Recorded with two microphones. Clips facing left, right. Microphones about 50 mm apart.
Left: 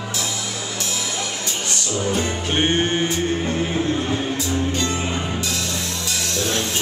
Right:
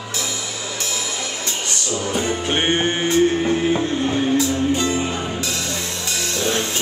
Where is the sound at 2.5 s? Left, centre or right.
Centre.